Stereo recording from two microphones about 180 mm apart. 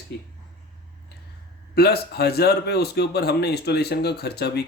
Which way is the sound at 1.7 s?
60° left (ahead or behind).